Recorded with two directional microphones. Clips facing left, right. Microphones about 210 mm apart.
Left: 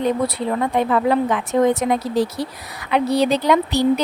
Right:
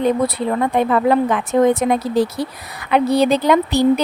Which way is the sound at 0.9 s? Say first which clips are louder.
Right 2 dB; 55° right (ahead or behind).